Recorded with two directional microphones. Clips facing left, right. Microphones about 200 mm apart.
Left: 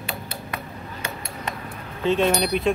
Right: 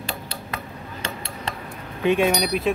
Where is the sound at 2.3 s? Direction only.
Centre (ahead or behind).